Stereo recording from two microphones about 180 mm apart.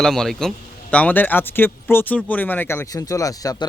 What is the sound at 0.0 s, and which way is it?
A man's voice, centre (ahead or behind).